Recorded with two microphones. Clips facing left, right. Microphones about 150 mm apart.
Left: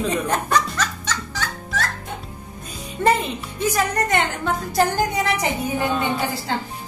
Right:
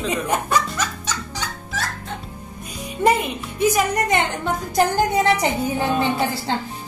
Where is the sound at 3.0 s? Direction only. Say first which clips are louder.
Right 1 dB; 10° right (ahead or behind).